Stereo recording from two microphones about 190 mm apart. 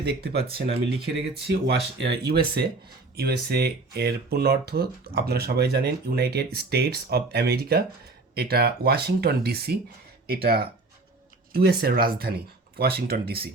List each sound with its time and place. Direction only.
0.0 s speech: 60° right (ahead or behind)